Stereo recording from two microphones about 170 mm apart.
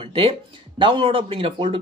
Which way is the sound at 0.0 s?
35° right (ahead or behind).